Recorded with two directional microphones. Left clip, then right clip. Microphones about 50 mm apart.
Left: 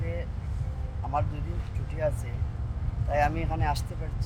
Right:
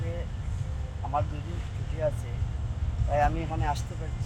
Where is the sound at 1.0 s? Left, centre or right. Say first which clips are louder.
Even; centre.